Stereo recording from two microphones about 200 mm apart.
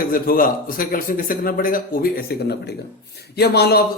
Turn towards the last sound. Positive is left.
turn(degrees=50)  # may be behind; listen again after turning